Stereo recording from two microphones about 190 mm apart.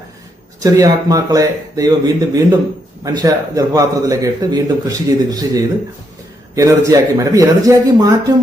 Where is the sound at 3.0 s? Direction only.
20° right (ahead or behind).